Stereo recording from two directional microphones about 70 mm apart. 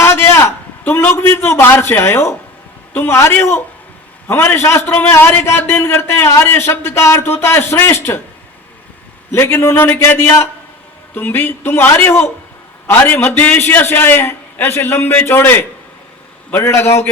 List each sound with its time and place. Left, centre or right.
0.0 s a man's voice: left
9.3 s a man's voice: left